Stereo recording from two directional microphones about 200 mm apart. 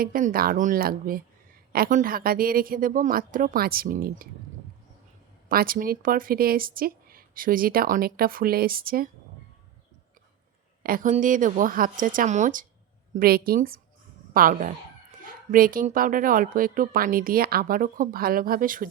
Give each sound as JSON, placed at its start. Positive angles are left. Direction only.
{"t": 0.0, "sound": "speech", "side_deg": -45}
{"t": 5.5, "sound": "speech", "side_deg": -45}
{"t": 10.8, "sound": "a woman's voice", "side_deg": -45}